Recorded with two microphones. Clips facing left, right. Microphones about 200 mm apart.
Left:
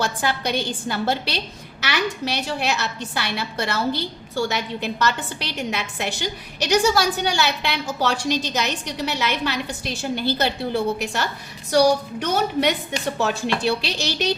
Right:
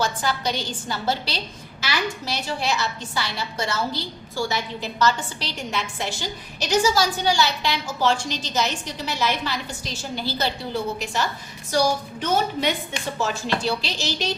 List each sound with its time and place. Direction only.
0.0 s a woman's voice: 60° left (ahead or behind)